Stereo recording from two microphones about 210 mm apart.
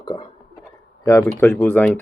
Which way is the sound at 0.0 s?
20° left (ahead or behind).